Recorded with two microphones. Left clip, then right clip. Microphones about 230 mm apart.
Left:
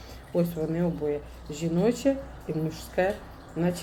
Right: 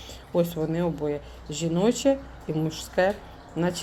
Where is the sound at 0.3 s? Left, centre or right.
Right.